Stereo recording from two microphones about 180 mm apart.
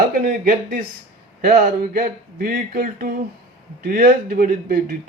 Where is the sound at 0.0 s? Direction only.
50° right (ahead or behind).